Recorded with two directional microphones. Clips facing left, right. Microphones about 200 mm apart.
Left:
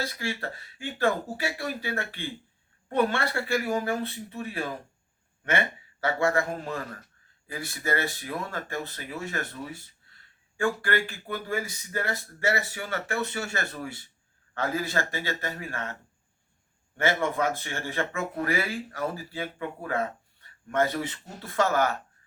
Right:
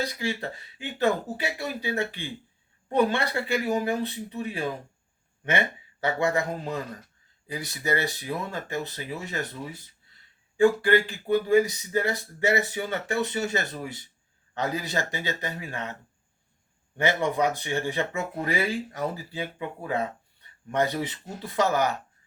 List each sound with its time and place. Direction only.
0.0 s speech: 20° right (ahead or behind)
6.0 s speech: 20° right (ahead or behind)
10.6 s speech: 20° right (ahead or behind)
17.0 s speech: 15° right (ahead or behind)